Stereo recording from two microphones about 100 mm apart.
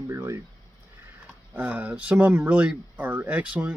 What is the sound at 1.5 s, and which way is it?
Speech, 15° right (ahead or behind).